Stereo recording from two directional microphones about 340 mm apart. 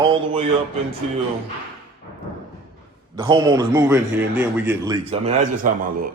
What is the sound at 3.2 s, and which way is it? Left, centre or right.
A man's voice, centre.